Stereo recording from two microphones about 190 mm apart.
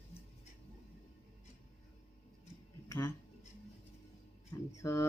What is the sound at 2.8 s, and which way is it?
Dishes, 15° left (ahead or behind).